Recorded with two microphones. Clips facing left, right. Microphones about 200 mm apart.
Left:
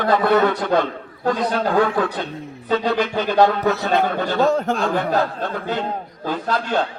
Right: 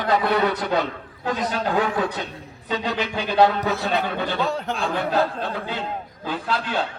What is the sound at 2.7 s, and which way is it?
Speech, 40° left (ahead or behind).